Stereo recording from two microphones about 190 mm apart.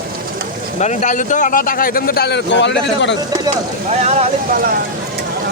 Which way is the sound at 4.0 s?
35° right (ahead or behind).